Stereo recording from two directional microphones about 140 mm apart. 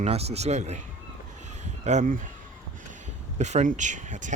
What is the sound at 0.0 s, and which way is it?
Speech, 50° right (ahead or behind).